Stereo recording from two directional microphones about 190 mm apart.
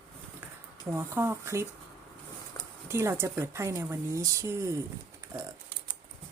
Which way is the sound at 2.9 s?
15° right (ahead or behind).